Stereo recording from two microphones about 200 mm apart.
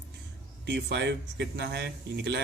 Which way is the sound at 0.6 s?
60° right (ahead or behind).